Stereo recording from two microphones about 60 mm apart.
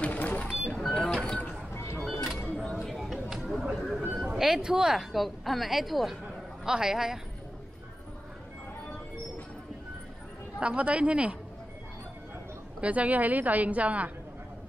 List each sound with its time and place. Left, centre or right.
0.0 s printer: left
0.7 s printer: centre
2.0 s music: centre
2.7 s a sound: centre
4.1 s a man's voice: centre
10.6 s a woman's voice: right
12.8 s a woman's voice: right